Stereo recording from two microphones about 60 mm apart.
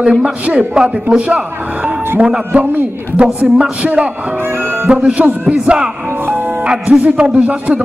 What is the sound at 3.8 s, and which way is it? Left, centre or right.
Speech, centre.